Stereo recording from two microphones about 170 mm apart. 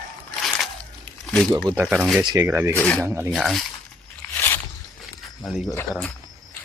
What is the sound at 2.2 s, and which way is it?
Speech, 20° right (ahead or behind).